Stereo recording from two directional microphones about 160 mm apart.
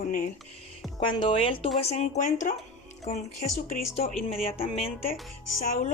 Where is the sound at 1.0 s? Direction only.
30° left (ahead or behind).